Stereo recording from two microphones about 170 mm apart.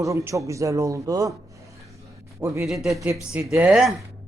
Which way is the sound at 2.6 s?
Centre (ahead or behind).